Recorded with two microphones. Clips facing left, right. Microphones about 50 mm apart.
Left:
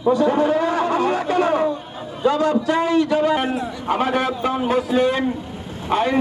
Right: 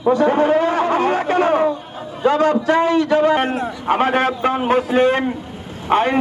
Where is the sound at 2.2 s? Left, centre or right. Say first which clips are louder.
Right 3 dB; right.